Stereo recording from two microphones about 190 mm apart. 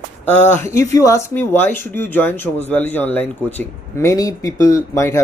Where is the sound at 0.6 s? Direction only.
15° left (ahead or behind).